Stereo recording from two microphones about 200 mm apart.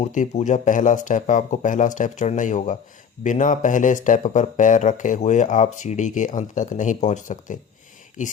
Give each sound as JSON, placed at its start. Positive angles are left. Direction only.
{"t": 0.0, "sound": "speech", "side_deg": 35}